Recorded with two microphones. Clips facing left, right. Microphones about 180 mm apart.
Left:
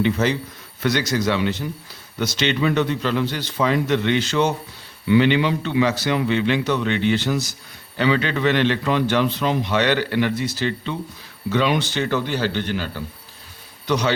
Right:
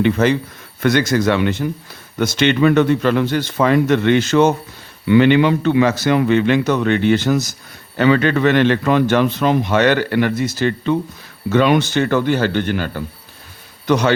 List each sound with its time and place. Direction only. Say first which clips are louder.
0.0 s a man's voice: right 5 dB; 55° right (ahead or behind)